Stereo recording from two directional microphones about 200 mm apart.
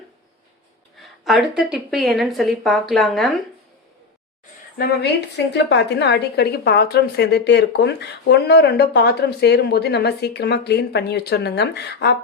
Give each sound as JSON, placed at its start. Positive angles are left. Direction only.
{"t": 1.0, "sound": "speech", "side_deg": 0}
{"t": 5.5, "sound": "a woman's voice", "side_deg": 60}